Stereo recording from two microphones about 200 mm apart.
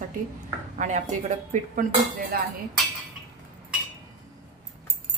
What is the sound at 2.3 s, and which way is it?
Speech, 50° right (ahead or behind).